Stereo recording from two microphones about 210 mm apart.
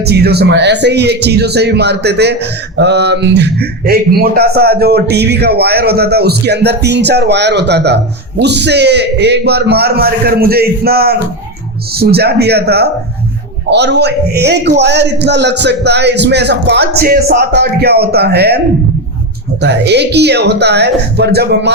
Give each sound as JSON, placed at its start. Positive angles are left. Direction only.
{"t": 0.0, "sound": "speech", "side_deg": -50}
{"t": 19.6, "sound": "speech", "side_deg": -55}